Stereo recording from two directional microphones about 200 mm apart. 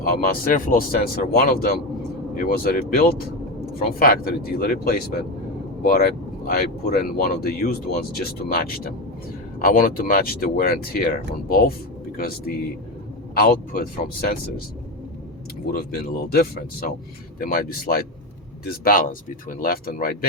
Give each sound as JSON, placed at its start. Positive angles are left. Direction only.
{"t": 0.0, "sound": "speech", "side_deg": 45}
{"t": 15.6, "sound": "speech", "side_deg": 50}